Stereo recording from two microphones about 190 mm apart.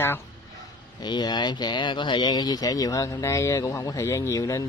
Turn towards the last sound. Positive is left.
turn(degrees=15)  # may be behind; listen again after turning